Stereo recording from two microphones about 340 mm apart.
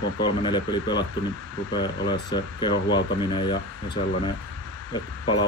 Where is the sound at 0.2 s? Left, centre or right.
Centre.